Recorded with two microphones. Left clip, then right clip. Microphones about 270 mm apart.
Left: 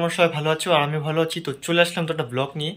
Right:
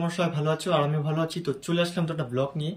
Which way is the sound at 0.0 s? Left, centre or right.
Centre.